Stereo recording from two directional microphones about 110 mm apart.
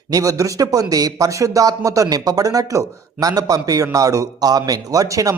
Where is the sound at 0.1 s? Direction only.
30° right (ahead or behind).